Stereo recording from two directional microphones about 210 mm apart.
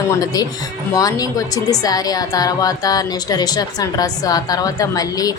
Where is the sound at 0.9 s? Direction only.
15° left (ahead or behind).